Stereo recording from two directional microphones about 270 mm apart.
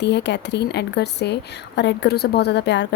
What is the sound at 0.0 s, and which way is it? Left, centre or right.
A woman's voice, left.